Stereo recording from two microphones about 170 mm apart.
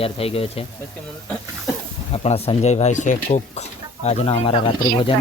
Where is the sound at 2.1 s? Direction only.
35° left (ahead or behind).